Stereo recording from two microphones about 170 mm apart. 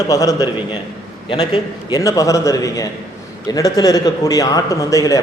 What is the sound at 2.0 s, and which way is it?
A man's voice, 20° left (ahead or behind).